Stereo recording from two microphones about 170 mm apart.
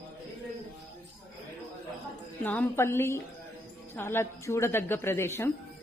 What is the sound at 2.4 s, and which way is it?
Speech, 10° left (ahead or behind).